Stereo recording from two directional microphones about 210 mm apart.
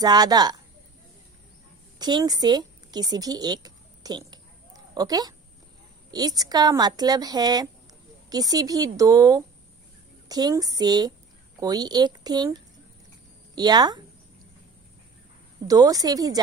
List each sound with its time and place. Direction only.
0.0 s speech: 20° right (ahead or behind)
2.0 s a sound: 20° right (ahead or behind)
6.1 s a woman's voice: 20° right (ahead or behind)
15.6 s a woman's voice: 15° right (ahead or behind)